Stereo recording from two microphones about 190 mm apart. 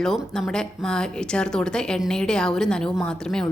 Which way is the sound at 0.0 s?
Centre (ahead or behind).